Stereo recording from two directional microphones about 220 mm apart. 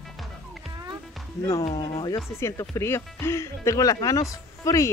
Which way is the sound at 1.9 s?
15° left (ahead or behind).